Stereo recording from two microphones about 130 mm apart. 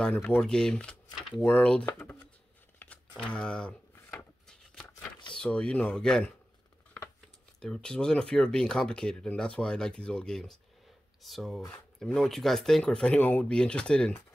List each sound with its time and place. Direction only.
0.0 s speech: 10° left (ahead or behind)
3.2 s speech: 10° left (ahead or behind)
3.9 s drawer open or close: 15° left (ahead or behind)
5.3 s speech: 5° left (ahead or behind)
7.6 s speech: 5° left (ahead or behind)